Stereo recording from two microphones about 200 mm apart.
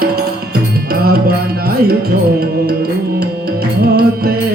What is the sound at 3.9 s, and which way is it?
Music, 50° right (ahead or behind).